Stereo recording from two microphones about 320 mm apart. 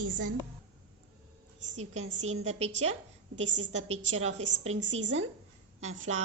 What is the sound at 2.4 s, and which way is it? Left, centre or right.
Speech, centre.